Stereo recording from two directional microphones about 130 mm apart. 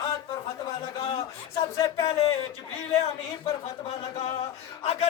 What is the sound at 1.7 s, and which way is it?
Speech, 30° left (ahead or behind).